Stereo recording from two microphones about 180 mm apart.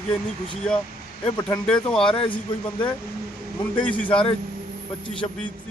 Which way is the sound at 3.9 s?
10° left (ahead or behind).